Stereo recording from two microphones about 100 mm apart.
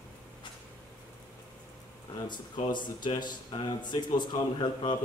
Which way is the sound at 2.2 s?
50° left (ahead or behind).